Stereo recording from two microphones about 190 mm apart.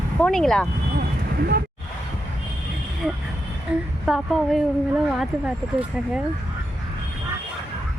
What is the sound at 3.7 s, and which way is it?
Speech, 5° right (ahead or behind).